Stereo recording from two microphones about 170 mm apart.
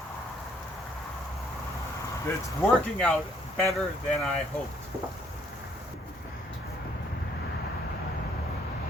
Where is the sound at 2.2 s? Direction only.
15° left (ahead or behind).